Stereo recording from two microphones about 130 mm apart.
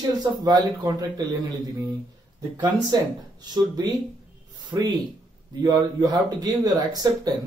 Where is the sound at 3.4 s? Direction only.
30° right (ahead or behind).